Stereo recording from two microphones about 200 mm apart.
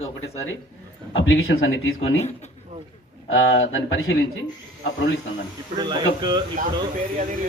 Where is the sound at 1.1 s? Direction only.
80° left.